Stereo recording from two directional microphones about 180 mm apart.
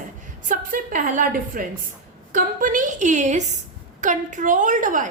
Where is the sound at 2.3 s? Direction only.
45° right (ahead or behind).